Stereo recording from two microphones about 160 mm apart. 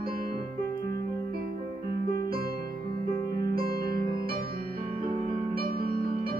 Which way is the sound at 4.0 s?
25° left (ahead or behind).